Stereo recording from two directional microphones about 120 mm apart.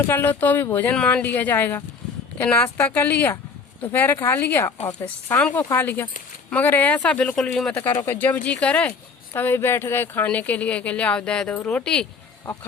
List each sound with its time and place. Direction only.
0.1 s speech: 15° left (ahead or behind)
8.0 s speech: 15° left (ahead or behind)